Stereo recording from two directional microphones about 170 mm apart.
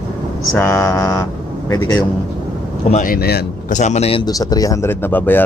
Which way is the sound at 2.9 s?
55° left (ahead or behind).